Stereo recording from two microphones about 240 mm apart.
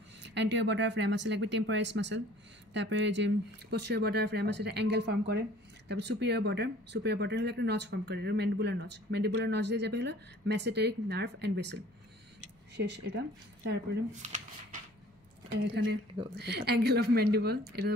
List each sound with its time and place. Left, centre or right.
0.3 s speech: right
14.2 s speech: right
15.5 s speech: right